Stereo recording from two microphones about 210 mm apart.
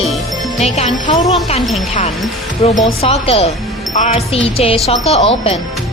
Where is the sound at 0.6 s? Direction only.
30° left (ahead or behind).